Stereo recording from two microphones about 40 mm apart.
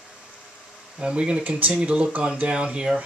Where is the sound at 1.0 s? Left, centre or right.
Right.